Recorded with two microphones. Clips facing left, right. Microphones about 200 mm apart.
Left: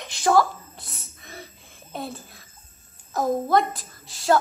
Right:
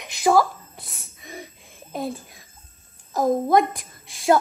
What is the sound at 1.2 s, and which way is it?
Music, 15° right (ahead or behind).